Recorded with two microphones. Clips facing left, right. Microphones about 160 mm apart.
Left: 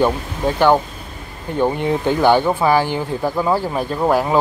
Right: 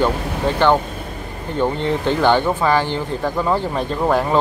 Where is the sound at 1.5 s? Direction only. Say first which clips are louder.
Left 2 dB; 10° left (ahead or behind).